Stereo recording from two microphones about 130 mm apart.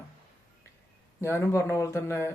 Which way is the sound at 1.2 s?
20° left (ahead or behind).